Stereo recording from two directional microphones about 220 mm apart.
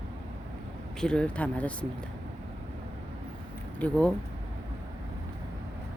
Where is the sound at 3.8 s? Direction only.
5° left (ahead or behind).